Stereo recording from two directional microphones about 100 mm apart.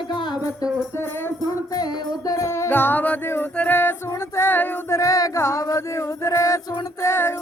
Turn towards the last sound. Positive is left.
turn(degrees=25)  # may be behind; listen again after turning